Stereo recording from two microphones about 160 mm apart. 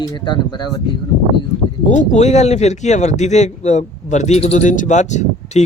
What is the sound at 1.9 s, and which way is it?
Speech, 50° left (ahead or behind).